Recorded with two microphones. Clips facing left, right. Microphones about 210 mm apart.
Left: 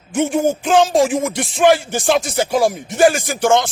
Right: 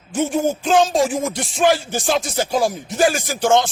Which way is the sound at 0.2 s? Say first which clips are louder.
Left 3 dB; 55° left (ahead or behind).